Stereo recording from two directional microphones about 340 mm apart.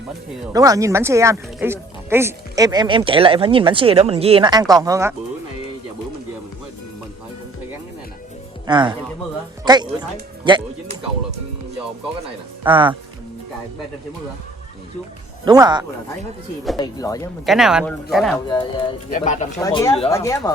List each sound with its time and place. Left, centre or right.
0.5 s speech: centre
8.6 s speech: centre
12.6 s speech: centre
15.4 s speech: centre
16.7 s speech: centre
17.4 s speech: centre
18.4 s speech: centre
19.5 s speech: centre